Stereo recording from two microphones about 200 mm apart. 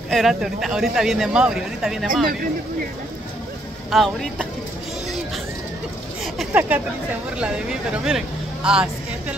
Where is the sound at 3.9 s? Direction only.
Centre (ahead or behind).